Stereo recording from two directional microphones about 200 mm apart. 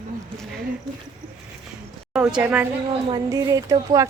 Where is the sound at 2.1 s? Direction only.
5° right (ahead or behind).